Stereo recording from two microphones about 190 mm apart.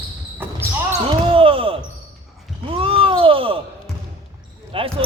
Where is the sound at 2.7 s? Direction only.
30° right (ahead or behind).